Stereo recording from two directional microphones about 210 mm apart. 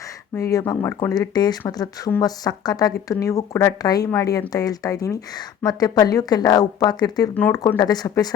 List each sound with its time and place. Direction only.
0.5 s speech: 15° left (ahead or behind)